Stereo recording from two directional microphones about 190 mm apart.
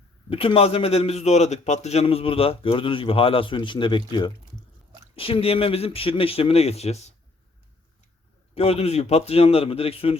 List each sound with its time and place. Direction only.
0.3 s a man's voice: 30° left (ahead or behind)
8.5 s a man's voice: 30° left (ahead or behind)